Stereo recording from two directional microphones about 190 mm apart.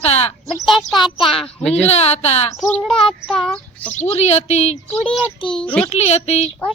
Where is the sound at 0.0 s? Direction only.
35° left (ahead or behind).